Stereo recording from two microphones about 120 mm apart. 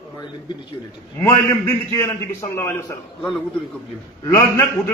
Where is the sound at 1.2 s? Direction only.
25° left (ahead or behind).